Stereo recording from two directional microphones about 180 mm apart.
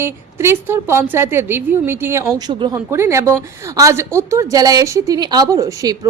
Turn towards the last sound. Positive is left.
turn(degrees=-20)  # may be behind; listen again after turning